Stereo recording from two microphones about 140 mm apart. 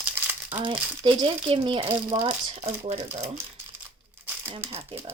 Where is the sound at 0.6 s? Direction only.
35° right (ahead or behind).